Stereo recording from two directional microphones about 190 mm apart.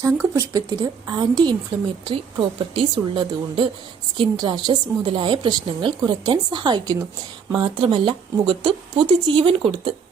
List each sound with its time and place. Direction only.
0.0 s a woman's voice: 15° right (ahead or behind)
2.7 s a woman's voice: 25° right (ahead or behind)